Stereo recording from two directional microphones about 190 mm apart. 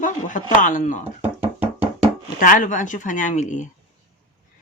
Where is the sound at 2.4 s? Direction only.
45° left (ahead or behind).